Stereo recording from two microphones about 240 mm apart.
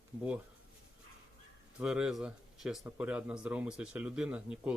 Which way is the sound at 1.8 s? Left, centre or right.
Centre.